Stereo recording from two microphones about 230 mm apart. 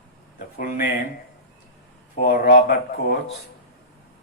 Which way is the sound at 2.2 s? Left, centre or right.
Left.